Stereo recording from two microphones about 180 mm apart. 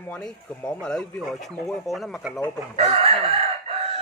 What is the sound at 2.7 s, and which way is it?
Chicken, 35° right (ahead or behind).